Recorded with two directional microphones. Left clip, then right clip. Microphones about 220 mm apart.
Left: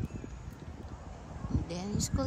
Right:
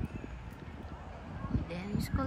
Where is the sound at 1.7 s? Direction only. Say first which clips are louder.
Left 2 dB; 10° left (ahead or behind).